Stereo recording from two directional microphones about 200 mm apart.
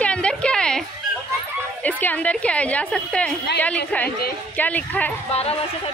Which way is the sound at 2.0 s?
10° left (ahead or behind).